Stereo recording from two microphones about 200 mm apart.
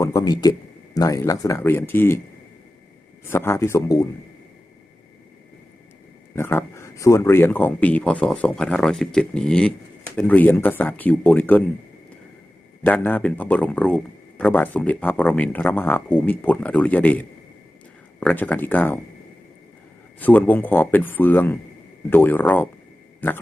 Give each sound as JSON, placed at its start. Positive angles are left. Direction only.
{"t": 0.0, "sound": "a man's voice", "side_deg": 20}
{"t": 3.2, "sound": "speech", "side_deg": 10}
{"t": 6.3, "sound": "speech", "side_deg": 10}
{"t": 12.8, "sound": "speech", "side_deg": 10}
{"t": 20.1, "sound": "speech", "side_deg": 10}